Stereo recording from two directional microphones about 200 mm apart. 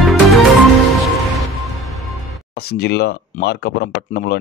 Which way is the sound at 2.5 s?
50° left (ahead or behind).